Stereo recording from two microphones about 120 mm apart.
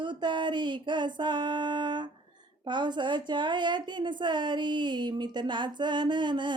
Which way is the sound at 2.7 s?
40° right (ahead or behind).